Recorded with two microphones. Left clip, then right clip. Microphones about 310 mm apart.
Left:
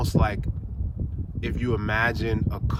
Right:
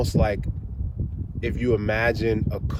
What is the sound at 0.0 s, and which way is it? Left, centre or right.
Speech, centre.